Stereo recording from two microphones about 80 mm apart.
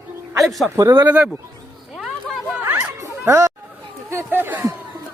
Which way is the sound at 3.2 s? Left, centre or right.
Right.